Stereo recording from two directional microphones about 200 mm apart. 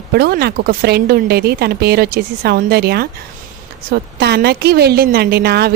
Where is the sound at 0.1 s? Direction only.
55° right (ahead or behind).